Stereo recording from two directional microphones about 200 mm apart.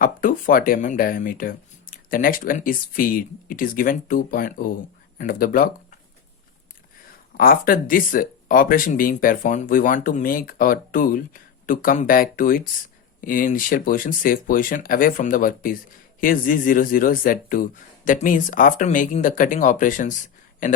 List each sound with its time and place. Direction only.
0.0 s speech: 45° left (ahead or behind)
7.3 s speech: 45° left (ahead or behind)